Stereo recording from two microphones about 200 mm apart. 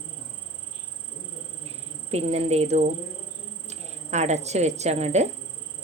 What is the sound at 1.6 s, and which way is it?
Insect, 30° right (ahead or behind).